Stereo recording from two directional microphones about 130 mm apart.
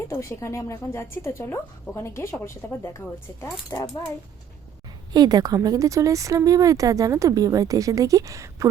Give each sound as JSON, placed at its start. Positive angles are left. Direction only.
{"t": 0.1, "sound": "a woman's voice", "side_deg": 25}
{"t": 5.1, "sound": "a woman's voice", "side_deg": -30}